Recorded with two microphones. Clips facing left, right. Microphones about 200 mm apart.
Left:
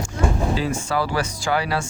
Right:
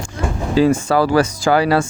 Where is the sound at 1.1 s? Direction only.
90° right.